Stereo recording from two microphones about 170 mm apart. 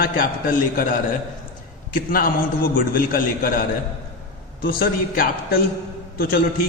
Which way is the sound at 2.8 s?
55° left (ahead or behind).